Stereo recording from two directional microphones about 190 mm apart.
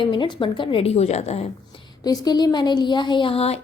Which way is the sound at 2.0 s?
20° left (ahead or behind).